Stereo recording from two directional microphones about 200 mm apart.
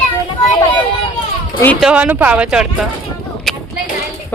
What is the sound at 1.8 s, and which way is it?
A woman's voice, 5° right (ahead or behind).